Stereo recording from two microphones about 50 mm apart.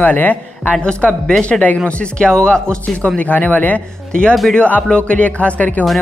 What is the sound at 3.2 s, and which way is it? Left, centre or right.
Speech, left.